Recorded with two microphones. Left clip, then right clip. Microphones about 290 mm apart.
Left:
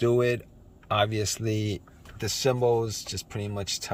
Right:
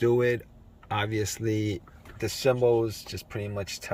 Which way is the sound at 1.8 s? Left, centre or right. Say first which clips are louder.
Right 2 dB; left.